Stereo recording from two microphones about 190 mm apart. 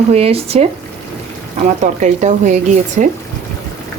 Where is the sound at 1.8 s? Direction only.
40° right (ahead or behind).